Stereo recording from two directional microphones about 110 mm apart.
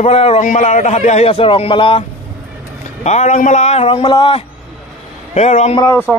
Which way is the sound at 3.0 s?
90° left.